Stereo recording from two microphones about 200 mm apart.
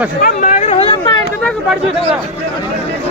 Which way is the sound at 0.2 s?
40° left (ahead or behind).